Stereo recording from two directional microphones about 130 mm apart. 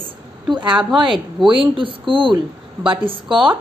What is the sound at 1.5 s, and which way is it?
A woman's voice, 40° right (ahead or behind).